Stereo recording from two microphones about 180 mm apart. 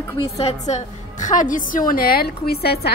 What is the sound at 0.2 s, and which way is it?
A woman's voice, 35° left (ahead or behind).